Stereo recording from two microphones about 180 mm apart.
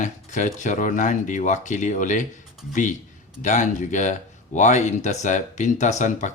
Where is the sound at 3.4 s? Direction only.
45° left (ahead or behind).